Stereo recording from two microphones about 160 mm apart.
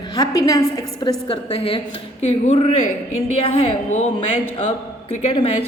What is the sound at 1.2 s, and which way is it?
A woman's voice, 35° left (ahead or behind).